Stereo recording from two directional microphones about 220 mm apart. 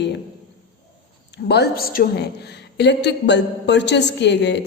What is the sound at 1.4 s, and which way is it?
A woman's voice, 50° left (ahead or behind).